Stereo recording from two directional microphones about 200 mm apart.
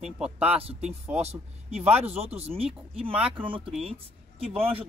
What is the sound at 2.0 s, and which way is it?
Speech, 30° right (ahead or behind).